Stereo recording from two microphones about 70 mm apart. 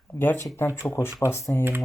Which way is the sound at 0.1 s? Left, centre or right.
Left.